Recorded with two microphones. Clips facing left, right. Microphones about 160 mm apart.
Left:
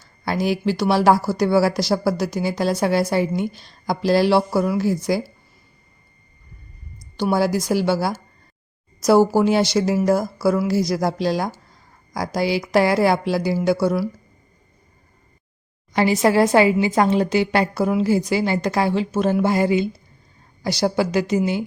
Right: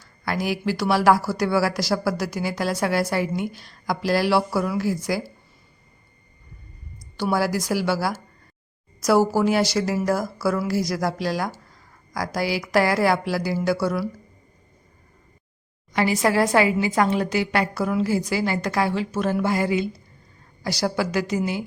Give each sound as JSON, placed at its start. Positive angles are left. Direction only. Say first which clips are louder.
{"t": 0.0, "sound": "a woman's voice", "louder": "left 4 dB", "side_deg": 25}
{"t": 7.2, "sound": "a woman's voice", "louder": "left 3 dB", "side_deg": 20}
{"t": 15.9, "sound": "a woman's voice", "louder": "left 4 dB", "side_deg": 30}